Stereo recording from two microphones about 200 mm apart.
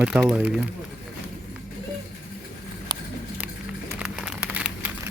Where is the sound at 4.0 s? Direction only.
5° right (ahead or behind).